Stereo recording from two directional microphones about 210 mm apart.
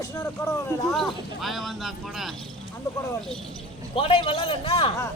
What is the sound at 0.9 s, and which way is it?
Speech, centre (ahead or behind).